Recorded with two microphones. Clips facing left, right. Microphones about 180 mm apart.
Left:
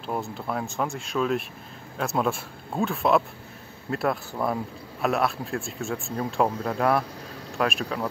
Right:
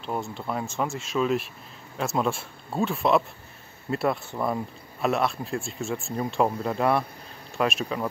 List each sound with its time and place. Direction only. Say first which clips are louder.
0.0 s speech: even; centre (ahead or behind)